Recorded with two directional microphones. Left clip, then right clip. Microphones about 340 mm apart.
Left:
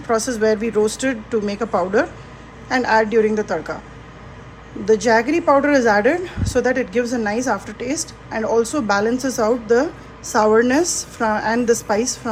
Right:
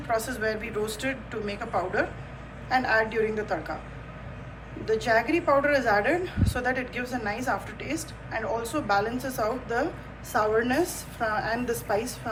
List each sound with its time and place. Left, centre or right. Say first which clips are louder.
0.1 s a woman's voice: left 10 dB; centre
4.9 s a woman's voice: left 8 dB; centre